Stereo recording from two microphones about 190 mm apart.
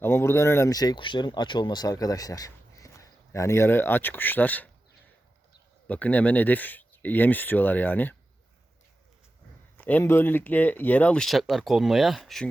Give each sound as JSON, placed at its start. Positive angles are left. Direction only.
{"t": 0.0, "sound": "speech", "side_deg": 10}
{"t": 5.9, "sound": "speech", "side_deg": 10}
{"t": 9.7, "sound": "speech", "side_deg": 10}